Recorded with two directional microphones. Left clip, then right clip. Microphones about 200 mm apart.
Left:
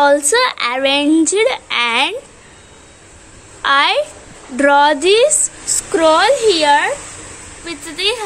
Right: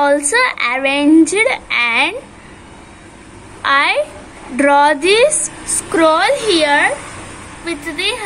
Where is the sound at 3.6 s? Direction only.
35° left (ahead or behind).